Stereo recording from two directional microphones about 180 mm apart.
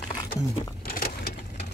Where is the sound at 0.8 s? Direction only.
55° left (ahead or behind).